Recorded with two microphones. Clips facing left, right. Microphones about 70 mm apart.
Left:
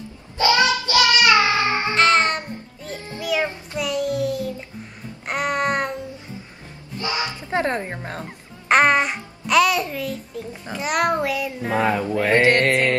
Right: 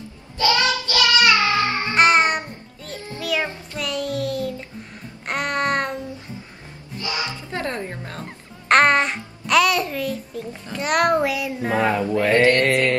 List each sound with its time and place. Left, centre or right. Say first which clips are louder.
0.4 s child singing: left 2 dB; left
2.0 s child singing: right 2 dB; centre
2.8 s music: right 1 dB; centre
3.7 s a sound: left 2 dB; centre
5.2 s music: left 1 dB; centre
7.0 s a sound: left 2 dB; left
8.6 s a child's voice: right 1 dB; centre
12.3 s mantra: even; left